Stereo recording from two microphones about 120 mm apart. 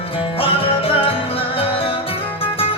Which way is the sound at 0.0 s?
50° left (ahead or behind).